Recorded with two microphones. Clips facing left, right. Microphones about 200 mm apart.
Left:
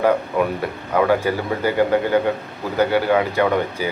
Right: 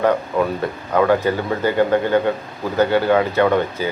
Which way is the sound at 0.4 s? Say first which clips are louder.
Right 1 dB; 10° left (ahead or behind).